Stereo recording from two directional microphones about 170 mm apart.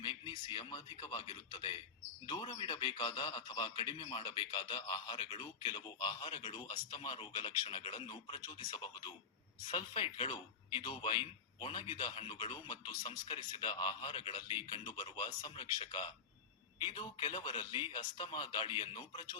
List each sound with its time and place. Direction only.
0.0 s a man's voice: 30° left (ahead or behind)